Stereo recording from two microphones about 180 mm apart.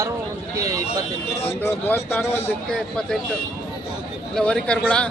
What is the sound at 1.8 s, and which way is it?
A man's voice, 10° left (ahead or behind).